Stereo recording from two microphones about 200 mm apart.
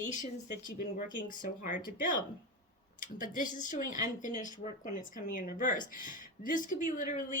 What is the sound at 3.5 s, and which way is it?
Speech, 40° left (ahead or behind).